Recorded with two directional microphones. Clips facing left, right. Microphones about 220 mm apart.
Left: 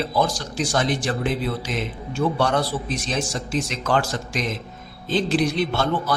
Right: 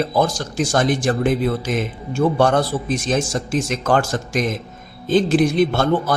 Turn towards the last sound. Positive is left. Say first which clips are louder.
# right 6 dB
turn(degrees=-50)  # may be behind; listen again after turning